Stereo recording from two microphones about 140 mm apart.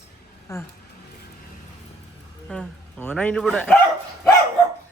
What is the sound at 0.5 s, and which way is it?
Speech, 20° left (ahead or behind).